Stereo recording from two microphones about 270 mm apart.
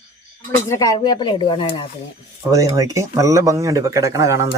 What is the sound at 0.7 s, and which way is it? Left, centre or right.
Speech, centre.